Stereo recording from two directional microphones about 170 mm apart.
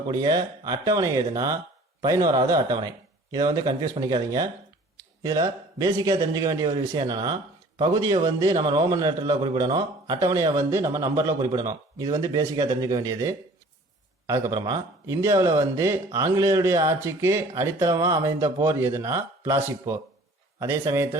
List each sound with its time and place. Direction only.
0.1 s a man's voice: 25° right (ahead or behind)